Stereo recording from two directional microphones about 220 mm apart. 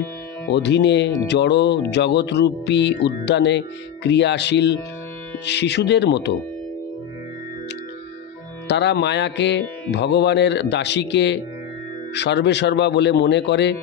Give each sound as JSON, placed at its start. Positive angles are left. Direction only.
{"t": 0.5, "sound": "speech", "side_deg": 50}
{"t": 8.6, "sound": "speech", "side_deg": 50}